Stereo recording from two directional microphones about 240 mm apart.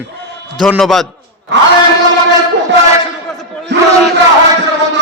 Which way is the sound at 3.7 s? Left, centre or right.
Right.